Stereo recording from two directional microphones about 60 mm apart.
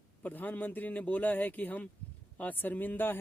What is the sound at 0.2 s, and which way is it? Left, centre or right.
A man's voice, left.